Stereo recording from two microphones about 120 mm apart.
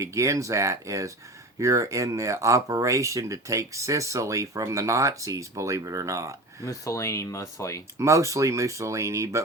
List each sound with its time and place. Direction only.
0.0 s speech: 25° right (ahead or behind)
6.7 s speech: 25° left (ahead or behind)
7.9 s speech: 25° right (ahead or behind)